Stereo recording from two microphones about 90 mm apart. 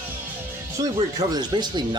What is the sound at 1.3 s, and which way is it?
Speech, 50° right (ahead or behind).